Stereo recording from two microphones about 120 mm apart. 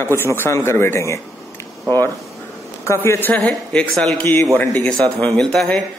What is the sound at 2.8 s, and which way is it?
A man's voice, 25° left (ahead or behind).